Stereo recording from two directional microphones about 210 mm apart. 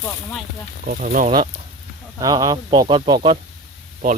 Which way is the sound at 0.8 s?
40° right (ahead or behind).